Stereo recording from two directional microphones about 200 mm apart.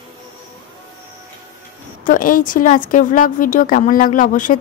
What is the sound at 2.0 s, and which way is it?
Speech, 45° left (ahead or behind).